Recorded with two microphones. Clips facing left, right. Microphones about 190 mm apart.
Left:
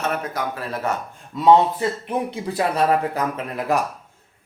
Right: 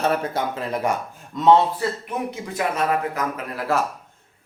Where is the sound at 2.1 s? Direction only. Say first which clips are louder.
Left 3 dB; 30° left (ahead or behind).